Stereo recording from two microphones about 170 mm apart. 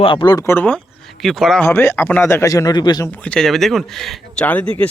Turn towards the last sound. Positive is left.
turn(degrees=10)  # may be behind; listen again after turning